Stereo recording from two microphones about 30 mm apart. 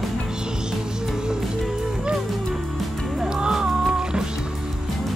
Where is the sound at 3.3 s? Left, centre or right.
Right.